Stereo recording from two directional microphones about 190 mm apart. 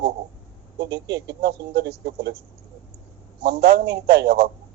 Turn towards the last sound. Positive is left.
turn(degrees=-60)  # may be behind; listen again after turning